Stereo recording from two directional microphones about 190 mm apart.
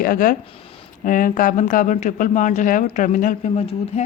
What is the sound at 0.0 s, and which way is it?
Speech, 50° left (ahead or behind).